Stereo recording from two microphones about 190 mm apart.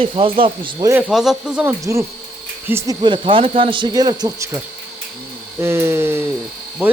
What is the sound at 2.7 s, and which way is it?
Speech, 15° right (ahead or behind).